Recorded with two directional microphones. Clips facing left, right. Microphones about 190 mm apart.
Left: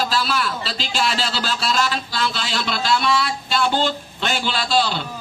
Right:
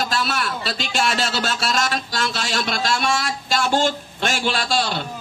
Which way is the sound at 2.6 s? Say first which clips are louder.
Left 2 dB; 50° right (ahead or behind).